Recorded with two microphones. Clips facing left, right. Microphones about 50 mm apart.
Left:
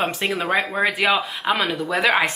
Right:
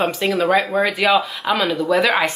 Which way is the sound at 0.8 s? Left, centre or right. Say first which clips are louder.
Right 3 dB; left.